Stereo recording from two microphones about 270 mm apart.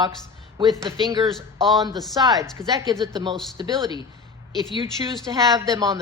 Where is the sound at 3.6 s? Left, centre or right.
Centre.